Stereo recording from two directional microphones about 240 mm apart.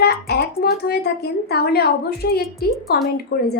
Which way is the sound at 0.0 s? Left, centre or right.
Left.